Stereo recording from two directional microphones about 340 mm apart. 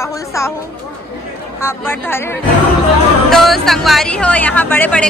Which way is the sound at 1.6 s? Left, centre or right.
Centre.